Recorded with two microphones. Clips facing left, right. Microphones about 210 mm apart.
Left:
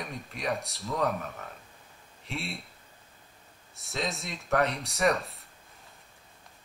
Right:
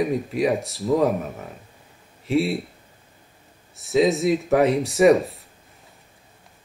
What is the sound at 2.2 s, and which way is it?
Speech, centre (ahead or behind).